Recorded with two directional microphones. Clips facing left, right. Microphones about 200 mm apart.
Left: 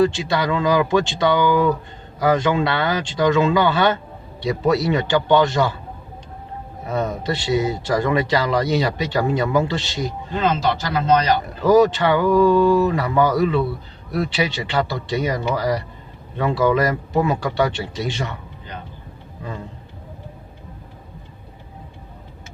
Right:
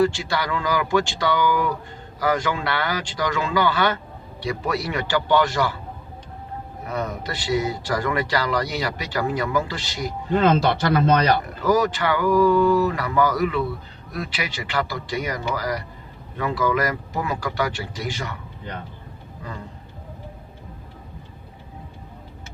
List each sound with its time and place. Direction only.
0.0 s speech: 20° left (ahead or behind)
6.8 s speech: 25° left (ahead or behind)
11.6 s speech: 25° left (ahead or behind)